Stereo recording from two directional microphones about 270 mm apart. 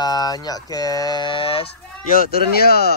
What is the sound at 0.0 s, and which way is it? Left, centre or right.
Speech, centre.